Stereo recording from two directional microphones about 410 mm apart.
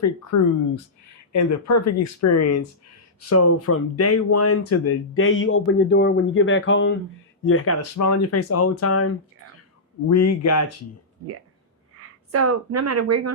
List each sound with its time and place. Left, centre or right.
0.3 s speech: left
7.8 s speech: left
11.9 s speech: right